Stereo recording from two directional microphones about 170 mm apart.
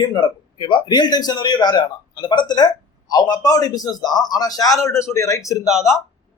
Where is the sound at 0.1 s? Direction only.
25° left (ahead or behind).